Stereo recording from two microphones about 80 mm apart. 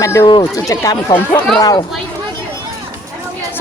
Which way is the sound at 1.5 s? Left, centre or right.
Left.